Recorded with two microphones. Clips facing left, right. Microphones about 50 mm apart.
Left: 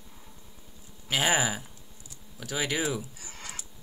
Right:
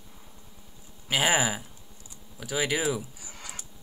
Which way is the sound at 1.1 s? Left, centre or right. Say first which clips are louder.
Right 1 dB; centre.